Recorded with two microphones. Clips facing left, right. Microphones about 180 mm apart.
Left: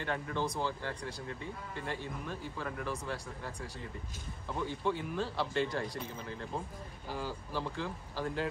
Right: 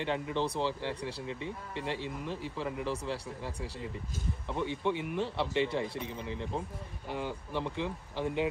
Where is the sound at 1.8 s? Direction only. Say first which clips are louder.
Right 4 dB; 85° right.